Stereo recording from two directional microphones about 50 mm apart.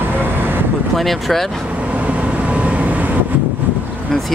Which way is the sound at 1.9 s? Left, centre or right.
Right.